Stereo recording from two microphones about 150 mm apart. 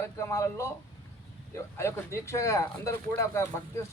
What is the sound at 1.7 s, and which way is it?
Speech, 20° left (ahead or behind).